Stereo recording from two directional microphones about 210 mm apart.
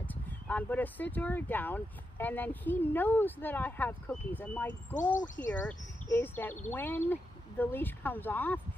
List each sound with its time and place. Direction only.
0.1 s speech: 5° left (ahead or behind)
5.1 s speech: 35° left (ahead or behind)
5.5 s speech: 10° left (ahead or behind)